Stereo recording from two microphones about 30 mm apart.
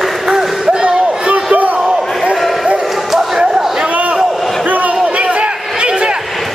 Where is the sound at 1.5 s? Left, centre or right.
Right.